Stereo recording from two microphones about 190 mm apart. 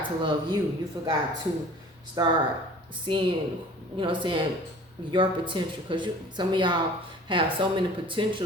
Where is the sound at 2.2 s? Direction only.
20° right (ahead or behind).